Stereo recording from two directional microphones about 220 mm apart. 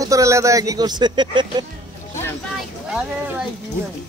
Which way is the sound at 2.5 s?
Centre (ahead or behind).